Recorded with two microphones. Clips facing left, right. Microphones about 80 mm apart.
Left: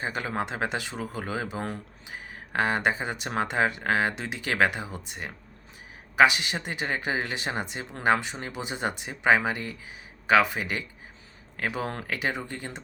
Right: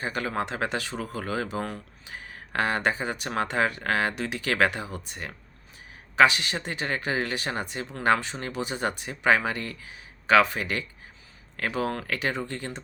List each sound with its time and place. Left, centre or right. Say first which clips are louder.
0.0 s speech: right 1 dB; left